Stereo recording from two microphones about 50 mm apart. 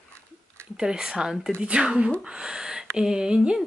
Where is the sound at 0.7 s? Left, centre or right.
Centre.